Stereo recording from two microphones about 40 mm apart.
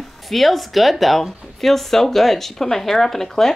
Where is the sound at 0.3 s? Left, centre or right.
Centre.